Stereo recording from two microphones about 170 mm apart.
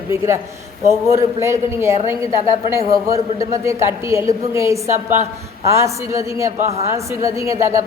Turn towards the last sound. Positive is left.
turn(degrees=-15)  # may be behind; listen again after turning